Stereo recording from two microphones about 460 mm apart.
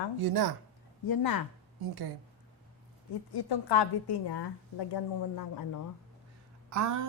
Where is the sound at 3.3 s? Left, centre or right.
Left.